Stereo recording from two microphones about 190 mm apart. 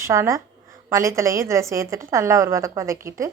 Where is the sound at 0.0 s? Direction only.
15° right (ahead or behind).